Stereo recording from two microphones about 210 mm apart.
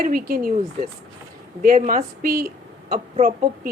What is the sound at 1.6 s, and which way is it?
A woman's voice, 40° right (ahead or behind).